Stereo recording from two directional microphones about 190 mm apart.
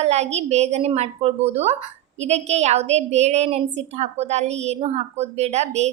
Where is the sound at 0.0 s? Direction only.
35° right (ahead or behind).